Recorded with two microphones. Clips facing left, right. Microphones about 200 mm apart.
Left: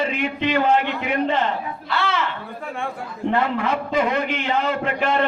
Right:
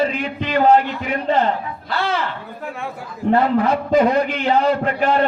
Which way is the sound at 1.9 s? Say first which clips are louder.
Right 2 dB; 35° right (ahead or behind).